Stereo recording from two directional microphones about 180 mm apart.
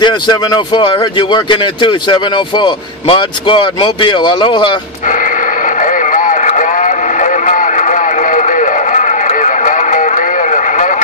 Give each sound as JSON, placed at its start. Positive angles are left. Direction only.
{"t": 0.0, "sound": "speech", "side_deg": 25}
{"t": 5.8, "sound": "radio", "side_deg": 45}